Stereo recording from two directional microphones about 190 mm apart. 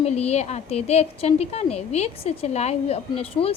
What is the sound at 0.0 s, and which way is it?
A woman's voice, 35° left (ahead or behind).